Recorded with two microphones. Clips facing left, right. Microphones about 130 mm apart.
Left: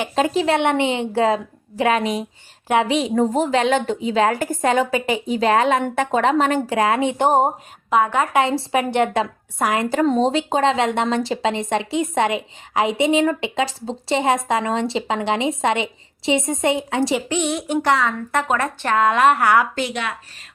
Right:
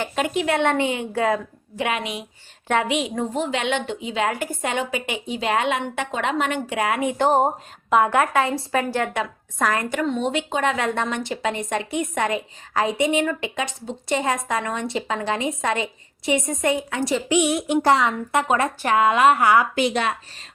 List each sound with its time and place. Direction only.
0.2 s a woman's voice: 30° left (ahead or behind)
9.7 s speech: 35° left (ahead or behind)
17.2 s a woman's voice: 10° right (ahead or behind)
19.9 s speech: 35° right (ahead or behind)